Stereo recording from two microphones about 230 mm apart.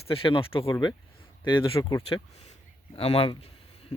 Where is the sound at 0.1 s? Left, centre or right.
Left.